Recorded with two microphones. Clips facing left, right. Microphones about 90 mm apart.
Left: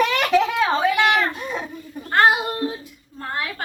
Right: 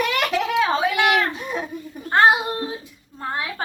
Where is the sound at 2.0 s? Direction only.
25° right (ahead or behind).